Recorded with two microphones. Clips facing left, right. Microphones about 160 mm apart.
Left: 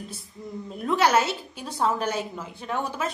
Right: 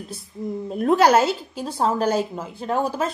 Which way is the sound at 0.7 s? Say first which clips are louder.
Right 6 dB; 45° right (ahead or behind).